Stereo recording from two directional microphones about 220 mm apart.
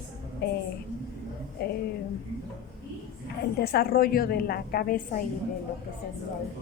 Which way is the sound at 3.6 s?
45° left (ahead or behind).